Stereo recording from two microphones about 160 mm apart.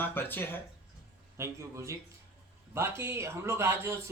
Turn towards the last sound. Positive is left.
turn(degrees=-15)  # may be behind; listen again after turning